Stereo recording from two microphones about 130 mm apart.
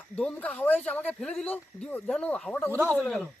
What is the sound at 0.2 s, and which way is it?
Speech, 10° left (ahead or behind).